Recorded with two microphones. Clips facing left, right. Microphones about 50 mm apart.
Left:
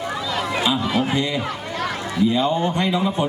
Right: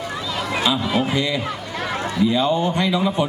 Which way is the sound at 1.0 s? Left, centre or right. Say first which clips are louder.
Even; left.